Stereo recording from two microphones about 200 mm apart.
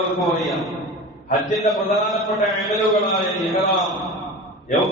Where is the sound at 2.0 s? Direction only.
Centre (ahead or behind).